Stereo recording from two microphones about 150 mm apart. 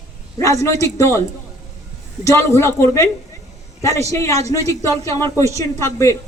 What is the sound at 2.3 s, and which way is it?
Speech, 20° left (ahead or behind).